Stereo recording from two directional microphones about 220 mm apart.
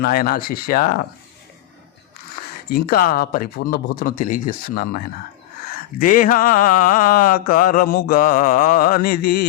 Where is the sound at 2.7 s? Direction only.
40° left (ahead or behind).